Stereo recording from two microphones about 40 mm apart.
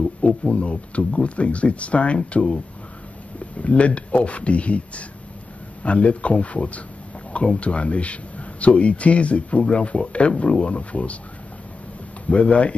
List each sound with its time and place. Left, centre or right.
0.5 s speech: left
12.3 s speech: left